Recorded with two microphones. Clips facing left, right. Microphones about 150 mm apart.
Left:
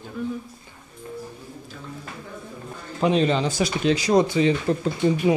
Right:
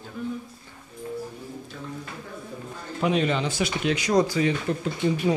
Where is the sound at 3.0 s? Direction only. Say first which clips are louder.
Left 3 dB; 30° left (ahead or behind).